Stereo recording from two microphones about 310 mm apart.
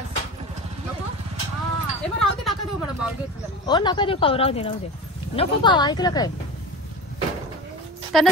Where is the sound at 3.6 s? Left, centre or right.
Centre.